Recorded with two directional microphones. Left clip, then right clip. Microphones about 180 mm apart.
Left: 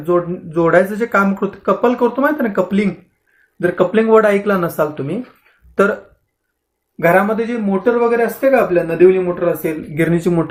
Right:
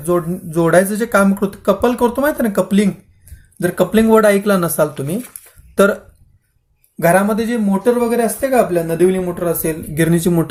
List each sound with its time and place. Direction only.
0.0 s speech: 50° right (ahead or behind)
7.0 s speech: 50° right (ahead or behind)